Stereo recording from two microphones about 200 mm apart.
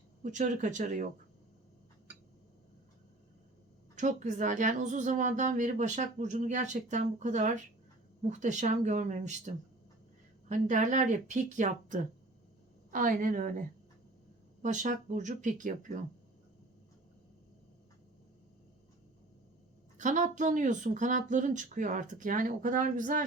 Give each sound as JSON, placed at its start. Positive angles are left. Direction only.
{"t": 0.2, "sound": "speech", "side_deg": -40}
{"t": 3.9, "sound": "a woman's voice", "side_deg": -40}
{"t": 20.0, "sound": "speech", "side_deg": -40}